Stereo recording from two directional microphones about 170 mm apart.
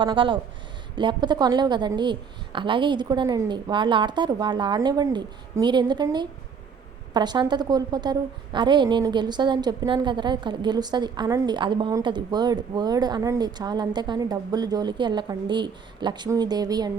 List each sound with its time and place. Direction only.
0.0 s a woman's voice: 25° right (ahead or behind)